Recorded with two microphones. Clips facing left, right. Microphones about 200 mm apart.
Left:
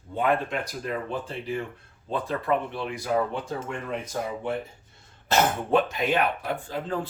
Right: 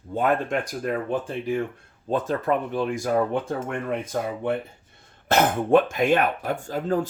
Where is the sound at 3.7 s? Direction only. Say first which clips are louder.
Right 4 dB; 55° right (ahead or behind).